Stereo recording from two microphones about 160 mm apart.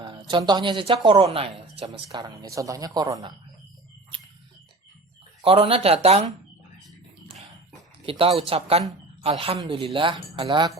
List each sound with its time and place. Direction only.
0.0 s speech: 30° right (ahead or behind)
1.8 s speech: 25° right (ahead or behind)
5.4 s speech: 35° right (ahead or behind)
8.0 s speech: 35° right (ahead or behind)